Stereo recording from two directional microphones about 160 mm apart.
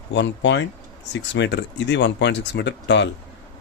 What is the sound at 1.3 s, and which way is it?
Speech, 90° left.